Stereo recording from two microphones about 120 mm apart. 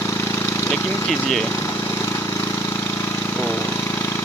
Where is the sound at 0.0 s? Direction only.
20° left (ahead or behind).